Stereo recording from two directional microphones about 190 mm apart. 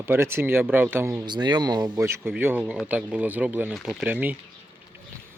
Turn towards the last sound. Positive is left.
turn(degrees=-10)  # may be behind; listen again after turning